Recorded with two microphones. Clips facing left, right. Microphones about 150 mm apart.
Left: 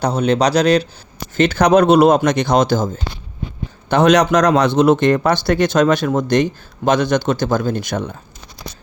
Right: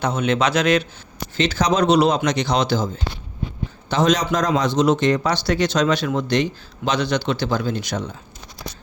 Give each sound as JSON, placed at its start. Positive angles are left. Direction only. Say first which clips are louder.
{"t": 0.0, "sound": "speech", "louder": "left 4 dB", "side_deg": 35}
{"t": 1.4, "sound": "a man's voice", "louder": "left 7 dB", "side_deg": 60}
{"t": 3.8, "sound": "a man's voice", "louder": "left 6 dB", "side_deg": 60}